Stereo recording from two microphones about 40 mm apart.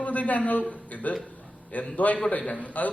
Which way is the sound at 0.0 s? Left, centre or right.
Left.